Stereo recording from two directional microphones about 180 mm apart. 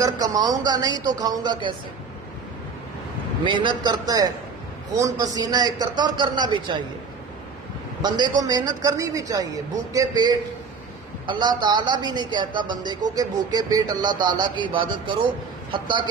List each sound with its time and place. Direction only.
0.0 s a woman's voice: 20° right (ahead or behind)
3.4 s a woman's voice: 25° right (ahead or behind)
5.0 s a woman's voice: 20° right (ahead or behind)
8.4 s a woman's voice: 20° right (ahead or behind)